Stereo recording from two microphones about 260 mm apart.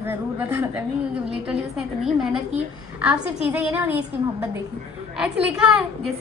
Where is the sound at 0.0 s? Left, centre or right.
Centre.